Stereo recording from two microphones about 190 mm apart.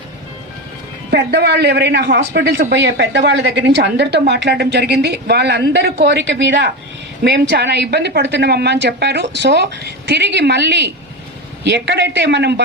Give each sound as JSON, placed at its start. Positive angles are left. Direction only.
{"t": 1.1, "sound": "a man's voice", "side_deg": -60}